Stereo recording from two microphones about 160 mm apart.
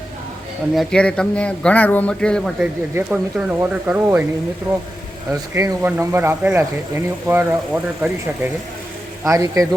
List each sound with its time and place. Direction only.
0.8 s a man's voice: 5° left (ahead or behind)
2.9 s speech: 10° right (ahead or behind)
5.3 s speech: 20° right (ahead or behind)
9.2 s speech: 20° right (ahead or behind)